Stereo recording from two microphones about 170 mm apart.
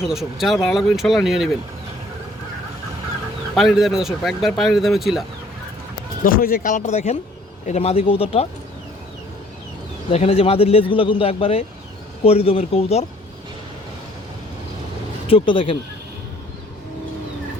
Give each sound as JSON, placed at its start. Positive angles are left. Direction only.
{"t": 0.0, "sound": "speech", "side_deg": -5}
{"t": 3.5, "sound": "speech", "side_deg": 0}
{"t": 6.2, "sound": "a man's voice", "side_deg": 60}
{"t": 10.1, "sound": "a man's voice", "side_deg": 35}
{"t": 15.3, "sound": "a man's voice", "side_deg": 30}